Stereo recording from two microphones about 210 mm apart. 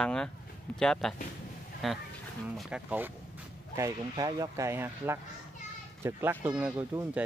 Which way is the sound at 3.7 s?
15° right (ahead or behind).